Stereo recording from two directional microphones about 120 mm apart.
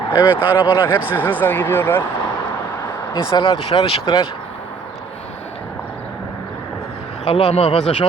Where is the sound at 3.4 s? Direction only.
50° left (ahead or behind).